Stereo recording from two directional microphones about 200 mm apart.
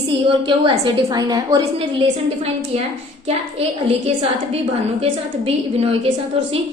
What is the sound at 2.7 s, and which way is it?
Speech, 30° right (ahead or behind).